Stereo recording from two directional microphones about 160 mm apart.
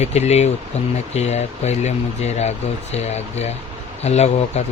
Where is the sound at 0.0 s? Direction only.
45° left (ahead or behind).